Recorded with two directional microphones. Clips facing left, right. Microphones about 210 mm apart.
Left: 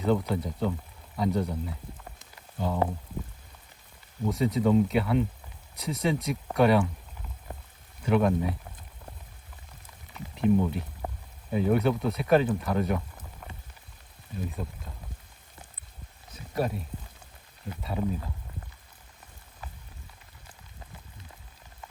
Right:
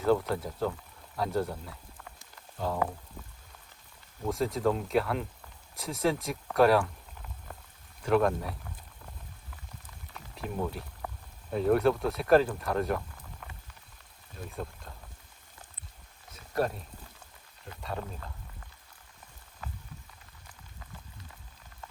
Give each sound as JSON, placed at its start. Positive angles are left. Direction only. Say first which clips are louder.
{"t": 0.0, "sound": "speech", "louder": "even", "side_deg": 0}
{"t": 2.3, "sound": "frying", "louder": "left 2 dB", "side_deg": 0}
{"t": 4.3, "sound": "speech", "louder": "left 4 dB", "side_deg": 0}
{"t": 7.5, "sound": "boiling", "louder": "left 5 dB", "side_deg": 20}
{"t": 8.0, "sound": "speech", "louder": "left 2 dB", "side_deg": 0}
{"t": 10.2, "sound": "speech", "louder": "left 10 dB", "side_deg": 0}
{"t": 14.4, "sound": "speech", "louder": "left 2 dB", "side_deg": 5}
{"t": 16.3, "sound": "a sound", "louder": "left 1 dB", "side_deg": 0}
{"t": 17.8, "sound": "speech", "louder": "left 7 dB", "side_deg": 5}